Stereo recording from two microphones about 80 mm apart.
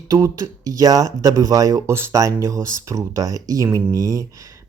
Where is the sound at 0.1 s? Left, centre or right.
Right.